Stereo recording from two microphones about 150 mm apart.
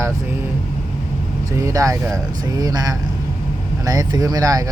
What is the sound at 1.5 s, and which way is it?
Speech, 20° right (ahead or behind).